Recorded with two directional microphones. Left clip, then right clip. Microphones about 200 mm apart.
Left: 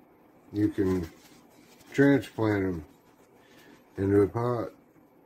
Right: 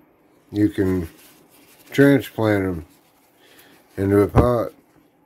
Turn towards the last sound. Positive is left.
turn(degrees=-55)  # may be behind; listen again after turning